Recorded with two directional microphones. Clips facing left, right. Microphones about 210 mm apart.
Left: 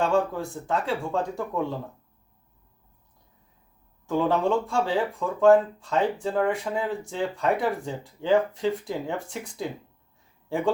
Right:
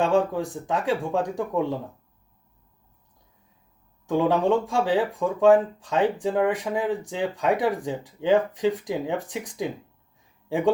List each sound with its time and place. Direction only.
0.0 s speech: 15° right (ahead or behind)
4.1 s speech: 15° right (ahead or behind)